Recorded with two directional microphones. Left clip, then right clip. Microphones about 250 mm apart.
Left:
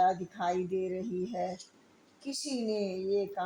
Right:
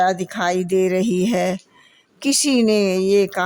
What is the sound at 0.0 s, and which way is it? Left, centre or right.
Speech, right.